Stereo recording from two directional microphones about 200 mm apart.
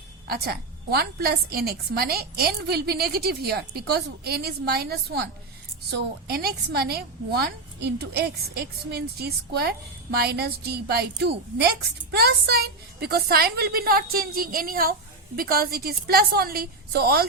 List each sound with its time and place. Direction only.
0.3 s a woman's voice: 50° right (ahead or behind)